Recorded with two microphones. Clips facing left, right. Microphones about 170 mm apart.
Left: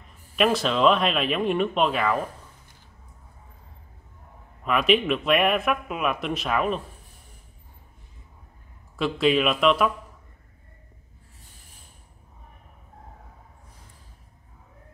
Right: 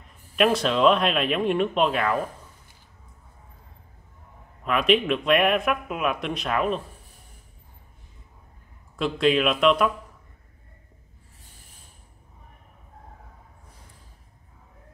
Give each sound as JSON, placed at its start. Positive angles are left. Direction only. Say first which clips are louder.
{"t": 0.4, "sound": "speech", "louder": "right 1 dB", "side_deg": 0}
{"t": 4.6, "sound": "speech", "louder": "even", "side_deg": 0}
{"t": 8.9, "sound": "speech", "louder": "even", "side_deg": 0}